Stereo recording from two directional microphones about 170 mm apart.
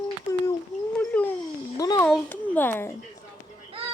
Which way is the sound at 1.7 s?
20° left (ahead or behind).